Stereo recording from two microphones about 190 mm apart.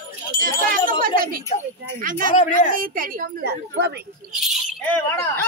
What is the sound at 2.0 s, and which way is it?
Speech, 45° right (ahead or behind).